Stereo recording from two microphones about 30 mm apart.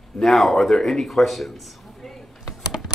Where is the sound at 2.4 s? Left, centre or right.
Centre.